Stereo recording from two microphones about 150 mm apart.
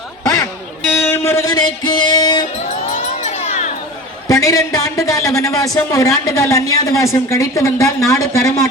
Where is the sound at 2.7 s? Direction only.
50° left (ahead or behind).